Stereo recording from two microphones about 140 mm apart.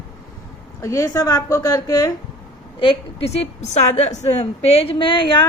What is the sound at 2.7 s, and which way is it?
A woman's voice, 40° left (ahead or behind).